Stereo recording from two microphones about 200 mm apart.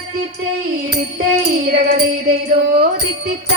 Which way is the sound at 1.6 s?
50° right (ahead or behind).